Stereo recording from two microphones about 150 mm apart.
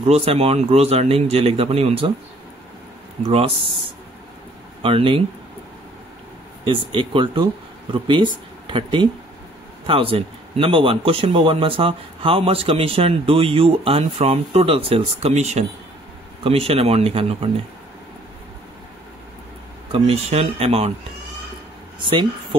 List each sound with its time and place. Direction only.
0.0 s speech: 45° right (ahead or behind)
3.3 s speech: 35° right (ahead or behind)
6.6 s speech: 35° right (ahead or behind)
19.9 s speech: 40° right (ahead or behind)